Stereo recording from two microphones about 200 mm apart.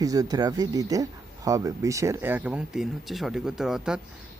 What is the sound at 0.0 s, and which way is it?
Speech, 20° right (ahead or behind).